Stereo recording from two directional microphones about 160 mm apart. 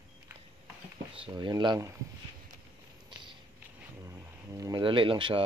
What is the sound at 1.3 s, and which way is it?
Speech, 25° right (ahead or behind).